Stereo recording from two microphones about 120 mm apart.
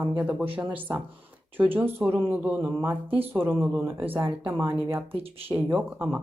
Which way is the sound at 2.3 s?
10° right (ahead or behind).